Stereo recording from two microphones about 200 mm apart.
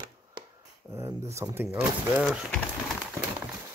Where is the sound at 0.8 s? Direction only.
15° right (ahead or behind).